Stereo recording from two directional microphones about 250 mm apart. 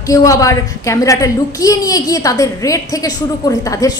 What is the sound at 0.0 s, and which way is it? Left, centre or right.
A woman's voice, centre.